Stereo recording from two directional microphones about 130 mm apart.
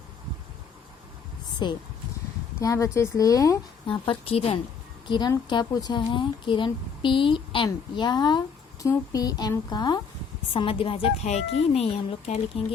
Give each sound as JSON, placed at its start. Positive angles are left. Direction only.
{"t": 1.6, "sound": "a woman's voice", "side_deg": 35}
{"t": 2.6, "sound": "speech", "side_deg": 25}
{"t": 3.8, "sound": "a woman's voice", "side_deg": 40}
{"t": 10.5, "sound": "speech", "side_deg": 45}